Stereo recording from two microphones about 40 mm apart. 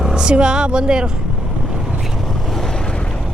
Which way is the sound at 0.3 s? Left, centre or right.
Right.